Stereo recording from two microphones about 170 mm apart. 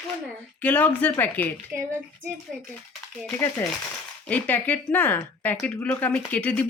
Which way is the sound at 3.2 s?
15° left (ahead or behind).